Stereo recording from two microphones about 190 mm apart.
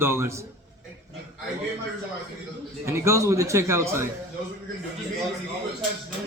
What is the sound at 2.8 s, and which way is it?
A man's voice, 15° right (ahead or behind).